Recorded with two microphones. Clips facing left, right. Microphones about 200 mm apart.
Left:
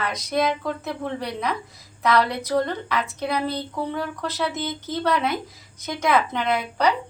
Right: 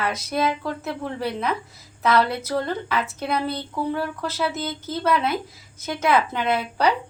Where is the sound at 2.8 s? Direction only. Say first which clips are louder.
Even; 5° right (ahead or behind).